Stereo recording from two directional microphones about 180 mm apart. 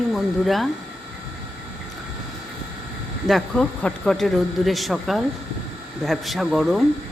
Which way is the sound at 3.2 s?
5° left (ahead or behind).